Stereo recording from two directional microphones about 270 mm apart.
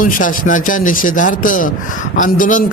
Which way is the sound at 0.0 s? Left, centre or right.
Left.